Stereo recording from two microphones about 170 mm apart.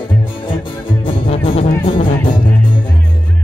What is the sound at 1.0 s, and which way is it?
Music, 30° left (ahead or behind).